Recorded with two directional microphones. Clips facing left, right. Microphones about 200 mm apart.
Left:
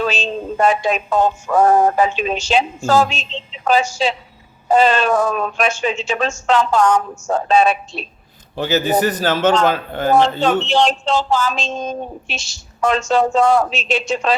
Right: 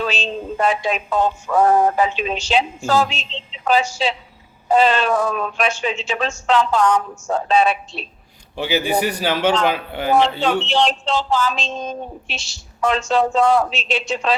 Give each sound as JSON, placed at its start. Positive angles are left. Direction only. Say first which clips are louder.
{"t": 0.0, "sound": "speech", "louder": "left 3 dB", "side_deg": 45}
{"t": 8.5, "sound": "a man's voice", "louder": "left 3 dB", "side_deg": -10}
{"t": 10.1, "sound": "speech", "louder": "left 2 dB", "side_deg": 45}